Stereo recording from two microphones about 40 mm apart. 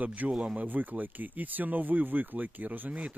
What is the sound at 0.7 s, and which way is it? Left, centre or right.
Speech, right.